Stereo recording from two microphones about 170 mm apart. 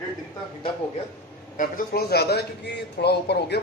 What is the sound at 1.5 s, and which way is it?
A man's voice, 55° left (ahead or behind).